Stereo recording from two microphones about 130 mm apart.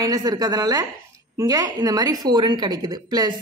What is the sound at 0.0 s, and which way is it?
A woman's voice, 30° right (ahead or behind).